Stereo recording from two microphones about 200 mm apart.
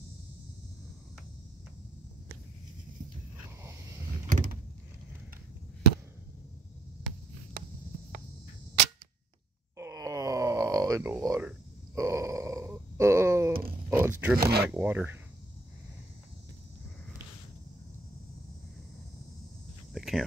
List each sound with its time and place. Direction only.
4.3 s power windows: 40° right (ahead or behind)
9.8 s groan: 15° right (ahead or behind)
13.8 s a sound: 10° right (ahead or behind)
14.3 s speech: 50° right (ahead or behind)
14.7 s speech: 10° right (ahead or behind)
19.9 s cricket: centre (ahead or behind)